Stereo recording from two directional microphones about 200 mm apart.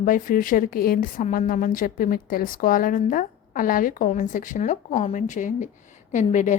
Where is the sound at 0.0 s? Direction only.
40° left (ahead or behind).